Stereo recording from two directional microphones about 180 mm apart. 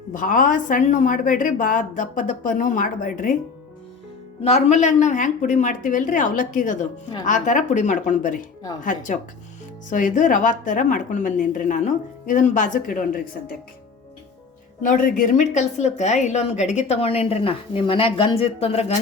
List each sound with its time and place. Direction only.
0.1 s a woman's voice: 50° left (ahead or behind)
4.4 s a woman's voice: 40° left (ahead or behind)
14.8 s speech: 45° left (ahead or behind)